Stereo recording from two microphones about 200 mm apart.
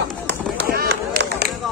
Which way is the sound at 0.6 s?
50° right (ahead or behind).